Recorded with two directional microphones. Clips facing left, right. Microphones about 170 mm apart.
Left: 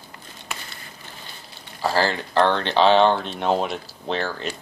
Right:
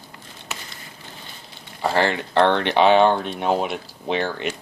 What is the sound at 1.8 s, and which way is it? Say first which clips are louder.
Speech: right 1 dB; 25° right (ahead or behind).